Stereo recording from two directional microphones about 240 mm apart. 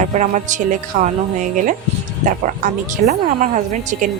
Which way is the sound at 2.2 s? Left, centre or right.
Right.